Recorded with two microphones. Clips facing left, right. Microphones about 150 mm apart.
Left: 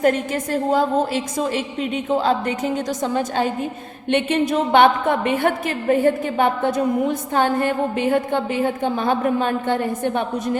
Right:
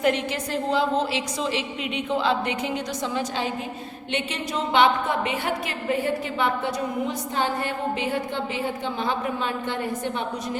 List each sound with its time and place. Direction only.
0.0 s a woman's voice: 45° left (ahead or behind)